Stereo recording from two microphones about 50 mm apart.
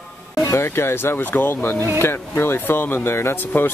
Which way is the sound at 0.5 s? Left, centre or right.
Left.